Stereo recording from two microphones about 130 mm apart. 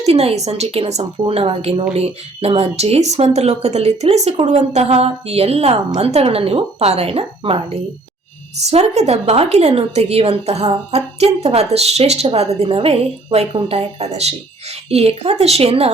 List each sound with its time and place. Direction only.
0.0 s speech: 50° right (ahead or behind)